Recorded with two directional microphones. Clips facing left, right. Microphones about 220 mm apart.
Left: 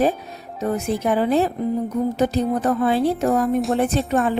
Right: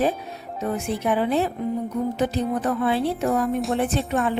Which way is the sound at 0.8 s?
40° left (ahead or behind).